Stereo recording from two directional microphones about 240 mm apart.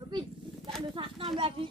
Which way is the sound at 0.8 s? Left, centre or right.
Right.